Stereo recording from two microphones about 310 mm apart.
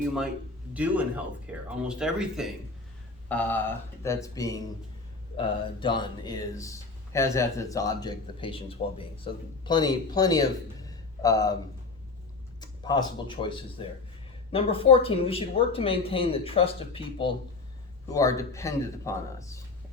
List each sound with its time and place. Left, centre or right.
0.7 s speech: centre
5.8 s speech: centre
12.5 s speech: centre